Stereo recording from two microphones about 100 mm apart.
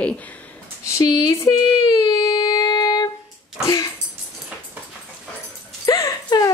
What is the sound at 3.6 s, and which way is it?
Speech, 35° left (ahead or behind).